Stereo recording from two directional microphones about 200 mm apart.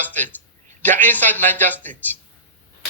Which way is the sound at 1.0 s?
10° left (ahead or behind).